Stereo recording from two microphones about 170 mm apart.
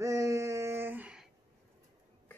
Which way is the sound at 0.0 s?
15° right (ahead or behind).